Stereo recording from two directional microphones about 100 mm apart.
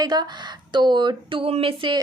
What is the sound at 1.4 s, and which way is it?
Speech, 65° right (ahead or behind).